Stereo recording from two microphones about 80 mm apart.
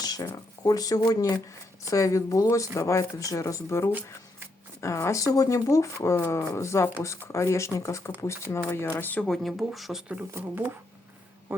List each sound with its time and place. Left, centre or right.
0.0 s a sound: left
0.6 s speech: left
1.9 s speech: left
9.2 s speech: centre
10.3 s speech: right